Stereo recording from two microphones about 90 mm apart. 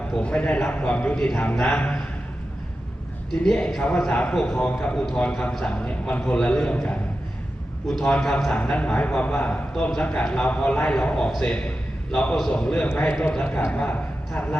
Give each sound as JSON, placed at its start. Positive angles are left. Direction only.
{"t": 0.2, "sound": "a man's voice", "side_deg": 15}
{"t": 3.4, "sound": "a man's voice", "side_deg": 5}